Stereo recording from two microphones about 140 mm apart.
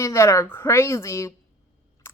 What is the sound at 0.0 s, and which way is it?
Speech, 20° left (ahead or behind).